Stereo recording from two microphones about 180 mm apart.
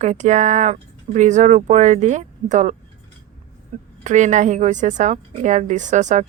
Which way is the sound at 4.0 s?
40° right (ahead or behind).